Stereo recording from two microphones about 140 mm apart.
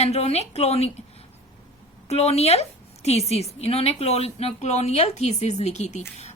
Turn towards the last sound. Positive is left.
turn(degrees=55)  # may be behind; listen again after turning